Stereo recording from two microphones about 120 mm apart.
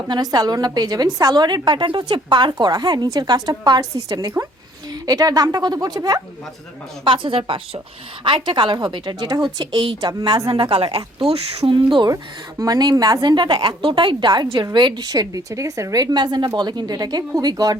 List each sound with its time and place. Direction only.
0.1 s a woman's voice: 35° right (ahead or behind)
7.0 s a woman's voice: 45° right (ahead or behind)
10.9 s speech: 60° right (ahead or behind)
11.9 s a woman's voice: 30° right (ahead or behind)